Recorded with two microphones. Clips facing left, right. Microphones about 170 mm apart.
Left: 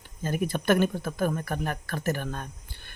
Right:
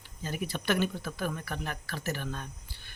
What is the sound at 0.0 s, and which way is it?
Speech, 50° left (ahead or behind).